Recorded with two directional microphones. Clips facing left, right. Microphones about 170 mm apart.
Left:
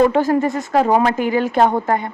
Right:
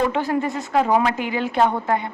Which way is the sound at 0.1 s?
45° left (ahead or behind).